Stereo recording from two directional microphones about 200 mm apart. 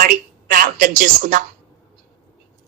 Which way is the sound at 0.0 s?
45° right (ahead or behind).